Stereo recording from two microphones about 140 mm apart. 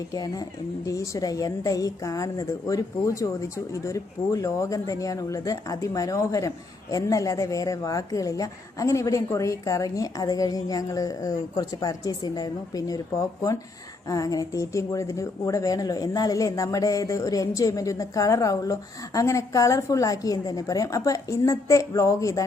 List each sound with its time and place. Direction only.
0.1 s a woman's voice: 25° left (ahead or behind)